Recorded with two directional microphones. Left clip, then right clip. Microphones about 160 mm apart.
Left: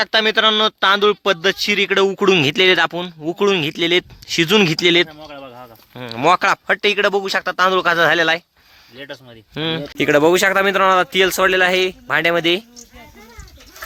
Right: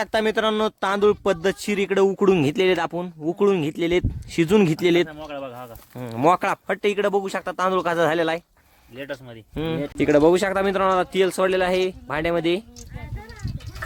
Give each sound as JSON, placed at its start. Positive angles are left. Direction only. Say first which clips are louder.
{"t": 0.0, "sound": "speech", "louder": "left 7 dB", "side_deg": -10}
{"t": 5.0, "sound": "a sound", "louder": "right 2 dB", "side_deg": -30}
{"t": 5.9, "sound": "speech", "louder": "left 4 dB", "side_deg": -5}
{"t": 9.6, "sound": "speech", "louder": "left 4 dB", "side_deg": 5}